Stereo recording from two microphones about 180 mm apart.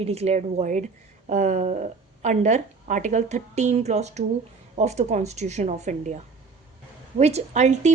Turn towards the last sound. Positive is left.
turn(degrees=-40)  # may be behind; listen again after turning